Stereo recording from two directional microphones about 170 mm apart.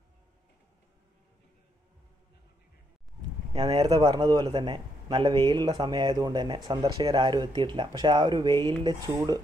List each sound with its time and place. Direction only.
3.5 s a man's voice: 25° right (ahead or behind)